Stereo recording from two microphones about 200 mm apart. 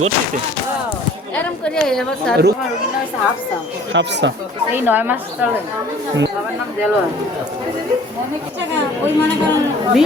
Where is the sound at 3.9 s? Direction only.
65° right (ahead or behind).